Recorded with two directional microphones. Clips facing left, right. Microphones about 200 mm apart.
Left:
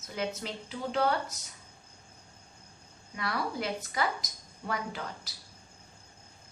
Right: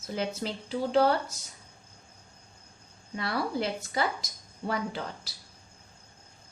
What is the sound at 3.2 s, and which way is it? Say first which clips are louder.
A woman's voice: right 3 dB; 30° right (ahead or behind).